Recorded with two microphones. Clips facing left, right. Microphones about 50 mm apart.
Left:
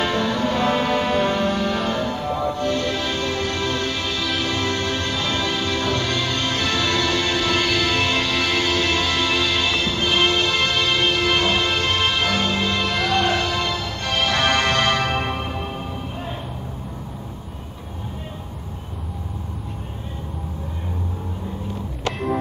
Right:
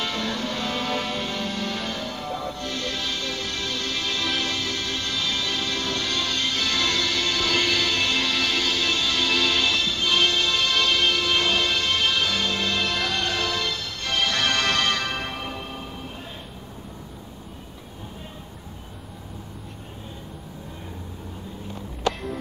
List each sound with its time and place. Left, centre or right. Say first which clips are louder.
0.0 s music: left 7 dB; left
1.5 s music: left 7 dB; centre
4.1 s music: left 2 dB; centre
4.6 s music: left 6 dB; left
6.4 s music: left 3 dB; left
7.5 s music: left 3 dB; centre
7.9 s music: left 3 dB; centre
9.1 s music: left 2 dB; centre
9.8 s music: left 3 dB; left
10.7 s music: left 2 dB; centre
12.7 s music: left 4 dB; centre
13.4 s music: left 4 dB; centre